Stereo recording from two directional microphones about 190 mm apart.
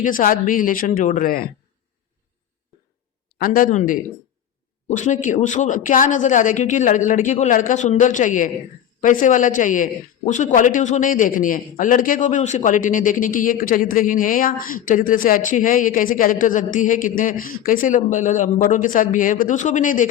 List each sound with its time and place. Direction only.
0.0 s a man's voice: 45° left (ahead or behind)
3.3 s a man's voice: 50° left (ahead or behind)